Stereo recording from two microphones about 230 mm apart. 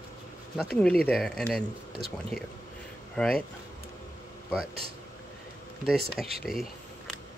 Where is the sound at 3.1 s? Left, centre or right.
Centre.